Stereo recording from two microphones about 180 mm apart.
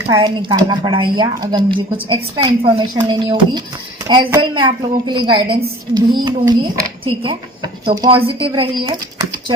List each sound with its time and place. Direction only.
0.0 s a woman's voice: 20° right (ahead or behind)